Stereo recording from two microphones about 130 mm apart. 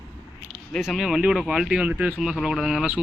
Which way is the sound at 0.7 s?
Centre (ahead or behind).